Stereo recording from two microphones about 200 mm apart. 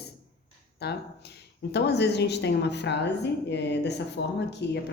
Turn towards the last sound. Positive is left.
turn(degrees=60)  # may be behind; listen again after turning